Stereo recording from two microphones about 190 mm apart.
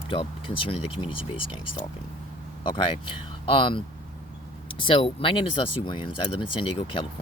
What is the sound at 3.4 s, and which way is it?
Speech, 30° left (ahead or behind).